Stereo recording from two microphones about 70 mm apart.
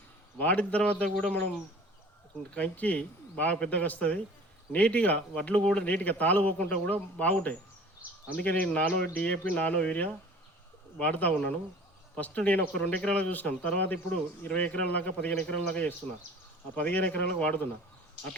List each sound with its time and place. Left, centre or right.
0.3 s a man's voice: left
2.5 s a man's voice: left